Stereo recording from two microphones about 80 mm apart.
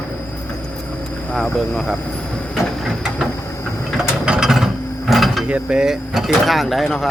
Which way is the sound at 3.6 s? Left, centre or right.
Left.